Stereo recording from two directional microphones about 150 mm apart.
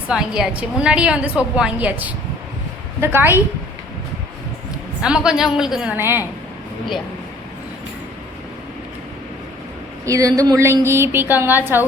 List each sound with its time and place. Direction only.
0.1 s a woman's voice: 5° right (ahead or behind)
5.0 s a woman's voice: 5° right (ahead or behind)
10.1 s a woman's voice: 20° right (ahead or behind)